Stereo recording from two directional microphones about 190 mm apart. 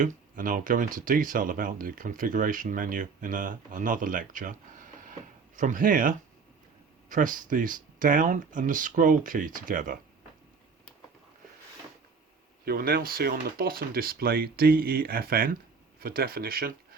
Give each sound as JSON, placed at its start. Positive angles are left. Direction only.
{"t": 0.0, "sound": "speech", "side_deg": -45}
{"t": 12.6, "sound": "speech", "side_deg": -50}